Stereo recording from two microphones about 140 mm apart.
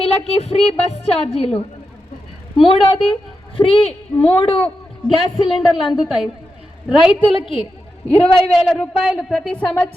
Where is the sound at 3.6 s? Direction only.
40° left (ahead or behind).